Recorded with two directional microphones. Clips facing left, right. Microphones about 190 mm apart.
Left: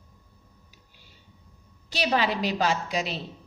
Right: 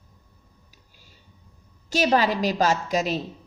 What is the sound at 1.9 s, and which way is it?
A woman's voice, 45° right (ahead or behind).